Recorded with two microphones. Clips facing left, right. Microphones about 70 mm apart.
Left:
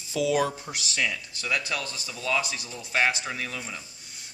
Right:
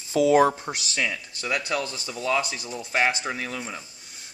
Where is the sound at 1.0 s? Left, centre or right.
Centre.